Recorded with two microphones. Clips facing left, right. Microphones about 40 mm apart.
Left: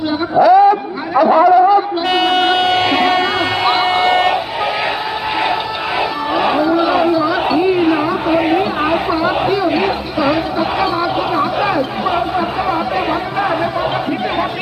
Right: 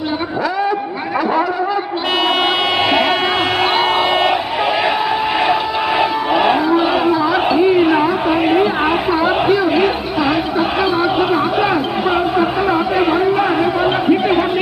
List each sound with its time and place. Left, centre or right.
0.3 s a man's voice: centre
2.2 s music: centre
6.5 s cattle: centre
6.7 s chatter: right
7.0 s a sound: centre